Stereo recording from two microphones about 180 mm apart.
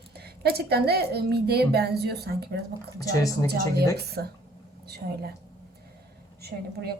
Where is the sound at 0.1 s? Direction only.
60° right (ahead or behind).